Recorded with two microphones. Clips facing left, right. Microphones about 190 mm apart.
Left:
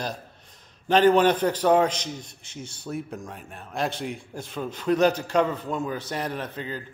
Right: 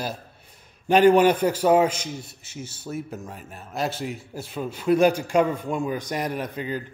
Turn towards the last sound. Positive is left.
turn(degrees=-15)  # may be behind; listen again after turning